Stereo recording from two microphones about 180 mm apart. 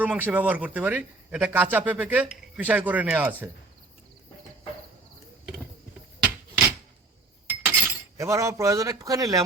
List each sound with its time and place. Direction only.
0.0 s a man's voice: 10° right (ahead or behind)
7.4 s speech: 10° right (ahead or behind)